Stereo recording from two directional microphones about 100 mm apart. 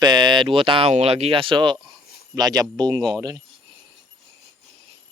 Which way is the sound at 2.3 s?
40° right (ahead or behind).